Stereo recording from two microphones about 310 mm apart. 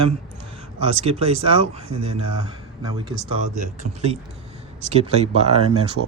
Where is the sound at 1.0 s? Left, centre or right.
Centre.